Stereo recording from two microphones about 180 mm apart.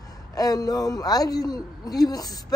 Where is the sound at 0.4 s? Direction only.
20° left (ahead or behind).